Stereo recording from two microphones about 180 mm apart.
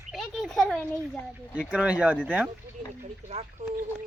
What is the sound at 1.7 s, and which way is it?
Speech, 5° right (ahead or behind).